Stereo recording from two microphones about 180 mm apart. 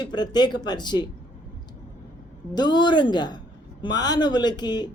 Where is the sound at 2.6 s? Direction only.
25° left (ahead or behind).